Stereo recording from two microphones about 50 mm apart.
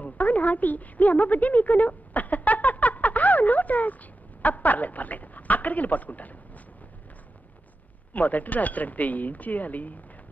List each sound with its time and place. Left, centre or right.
0.0 s a sound: left
4.4 s a woman's voice: left
8.1 s speech: left